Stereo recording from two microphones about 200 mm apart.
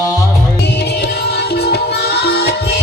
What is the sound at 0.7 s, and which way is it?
Music, 55° left (ahead or behind).